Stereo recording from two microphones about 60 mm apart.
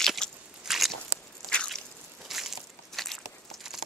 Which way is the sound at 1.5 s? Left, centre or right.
Centre.